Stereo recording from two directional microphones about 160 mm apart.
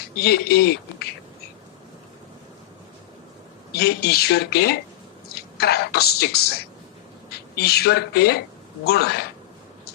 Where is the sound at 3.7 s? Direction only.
80° left.